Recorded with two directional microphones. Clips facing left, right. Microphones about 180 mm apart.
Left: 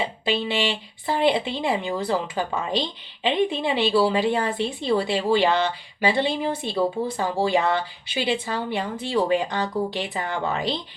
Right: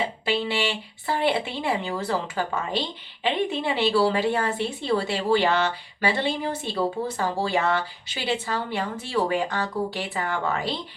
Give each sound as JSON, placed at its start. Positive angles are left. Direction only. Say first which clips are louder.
{"t": 0.3, "sound": "a woman's voice", "louder": "left 2 dB", "side_deg": 20}